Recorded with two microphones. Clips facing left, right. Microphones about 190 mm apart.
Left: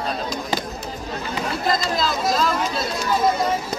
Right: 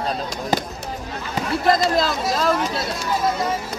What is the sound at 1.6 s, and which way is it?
Speech, 65° right (ahead or behind).